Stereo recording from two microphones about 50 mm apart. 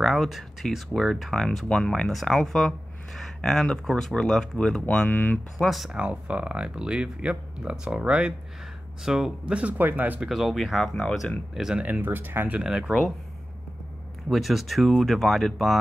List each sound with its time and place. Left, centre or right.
0.0 s speech: centre
5.1 s speech: left
5.6 s speech: centre
5.9 s speech: right
9.0 s speech: centre
9.5 s speech: right
9.8 s speech: right
10.2 s speech: centre
11.5 s speech: centre
11.8 s speech: right
12.6 s speech: centre
14.3 s speech: centre